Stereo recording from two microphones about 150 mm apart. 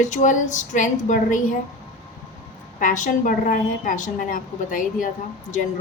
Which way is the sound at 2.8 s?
60° left (ahead or behind).